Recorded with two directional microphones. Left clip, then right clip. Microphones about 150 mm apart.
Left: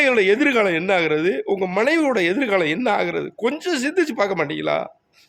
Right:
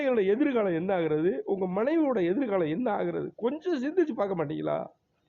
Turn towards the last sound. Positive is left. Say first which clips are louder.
# left 9 dB
turn(degrees=25)  # may be behind; listen again after turning